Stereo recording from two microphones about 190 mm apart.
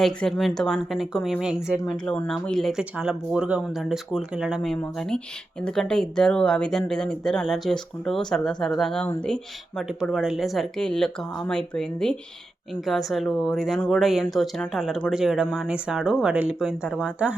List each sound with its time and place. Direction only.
0.0 s a woman's voice: centre (ahead or behind)